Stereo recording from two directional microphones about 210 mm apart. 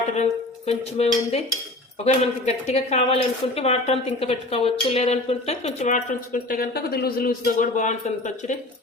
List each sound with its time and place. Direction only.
0.1 s speech: 30° left (ahead or behind)